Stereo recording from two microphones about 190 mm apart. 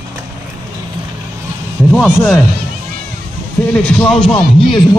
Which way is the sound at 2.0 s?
Centre (ahead or behind).